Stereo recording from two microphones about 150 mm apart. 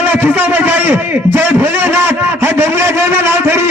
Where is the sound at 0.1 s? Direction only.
15° right (ahead or behind).